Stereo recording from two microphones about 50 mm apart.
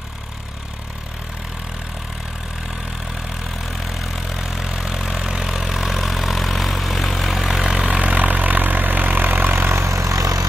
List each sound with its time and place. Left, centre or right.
3.9 s vehicle: centre
8.0 s vehicle: right
9.8 s vehicle: right